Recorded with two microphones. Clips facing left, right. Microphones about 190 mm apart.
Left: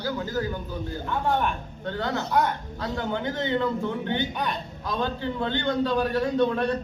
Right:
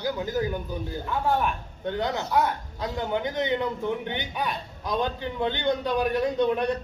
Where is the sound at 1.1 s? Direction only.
5° right (ahead or behind).